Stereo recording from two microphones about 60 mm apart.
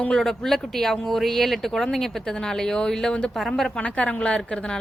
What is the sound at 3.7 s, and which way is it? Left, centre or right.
Speech, centre.